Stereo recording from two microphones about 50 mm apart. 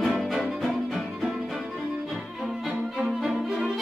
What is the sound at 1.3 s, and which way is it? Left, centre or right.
Violin, centre.